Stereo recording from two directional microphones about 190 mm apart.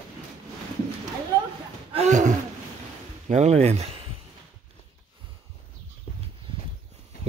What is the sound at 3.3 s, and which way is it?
Speech, 35° right (ahead or behind).